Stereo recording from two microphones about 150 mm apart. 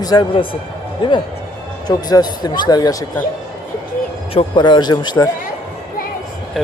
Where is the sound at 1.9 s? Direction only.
25° left (ahead or behind).